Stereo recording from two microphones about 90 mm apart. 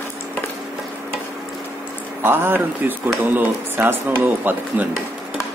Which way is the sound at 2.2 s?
25° right (ahead or behind).